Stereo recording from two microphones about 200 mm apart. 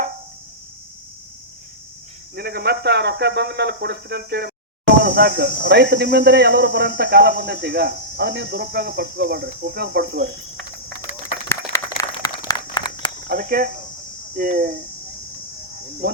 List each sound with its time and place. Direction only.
2.3 s speech: 50° right (ahead or behind)
11.4 s a sound: 15° left (ahead or behind)
13.2 s speech: 50° right (ahead or behind)
16.0 s speech: 50° right (ahead or behind)